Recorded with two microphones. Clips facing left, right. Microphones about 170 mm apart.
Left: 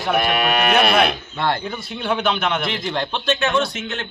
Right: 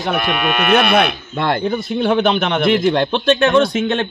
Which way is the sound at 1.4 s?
50° right (ahead or behind).